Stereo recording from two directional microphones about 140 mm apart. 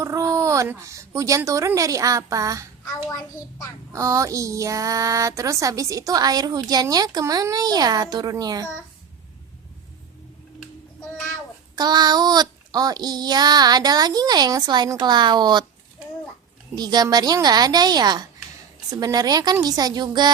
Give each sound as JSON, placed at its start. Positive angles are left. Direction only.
{"t": 0.0, "sound": "speech", "side_deg": -20}
{"t": 2.9, "sound": "a child's voice", "side_deg": 25}
{"t": 3.9, "sound": "speech", "side_deg": -20}
{"t": 11.8, "sound": "speech", "side_deg": -30}
{"t": 16.7, "sound": "speech", "side_deg": -30}